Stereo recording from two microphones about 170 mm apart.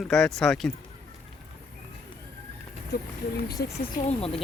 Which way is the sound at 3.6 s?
75° left (ahead or behind).